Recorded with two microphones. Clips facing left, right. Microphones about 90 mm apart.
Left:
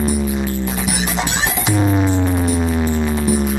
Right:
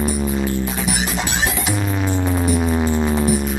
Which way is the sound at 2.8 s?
10° right (ahead or behind).